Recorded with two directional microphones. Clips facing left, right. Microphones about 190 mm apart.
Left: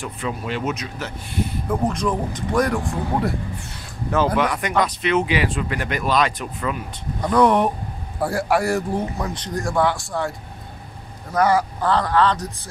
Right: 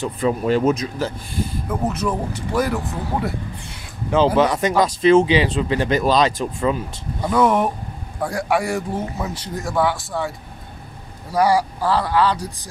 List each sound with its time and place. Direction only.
0.2 s speech: 40° right (ahead or behind)
1.7 s speech: 5° right (ahead or behind)
4.4 s speech: 25° right (ahead or behind)
7.2 s speech: 5° right (ahead or behind)
11.3 s speech: 10° right (ahead or behind)